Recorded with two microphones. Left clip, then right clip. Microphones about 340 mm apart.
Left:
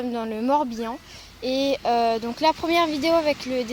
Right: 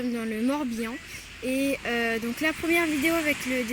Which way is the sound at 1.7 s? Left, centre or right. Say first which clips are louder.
Left 6 dB; left.